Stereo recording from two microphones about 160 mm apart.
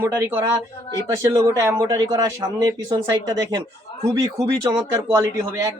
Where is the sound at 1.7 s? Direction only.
25° right (ahead or behind).